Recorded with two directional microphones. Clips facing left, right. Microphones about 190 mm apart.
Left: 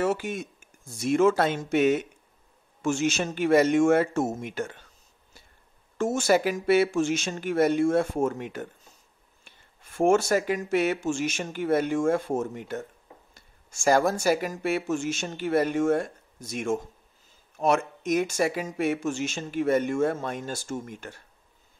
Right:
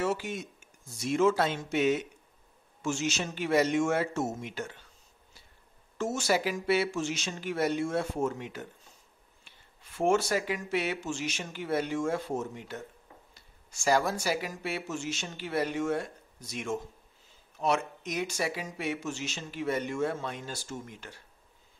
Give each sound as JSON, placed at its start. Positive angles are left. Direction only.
{"t": 0.0, "sound": "speech", "side_deg": 50}
{"t": 5.9, "sound": "speech", "side_deg": 50}